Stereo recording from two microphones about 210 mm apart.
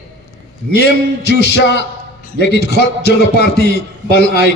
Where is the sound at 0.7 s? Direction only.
50° left (ahead or behind).